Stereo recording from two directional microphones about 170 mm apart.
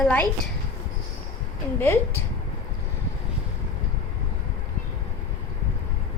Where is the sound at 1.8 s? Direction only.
15° left (ahead or behind).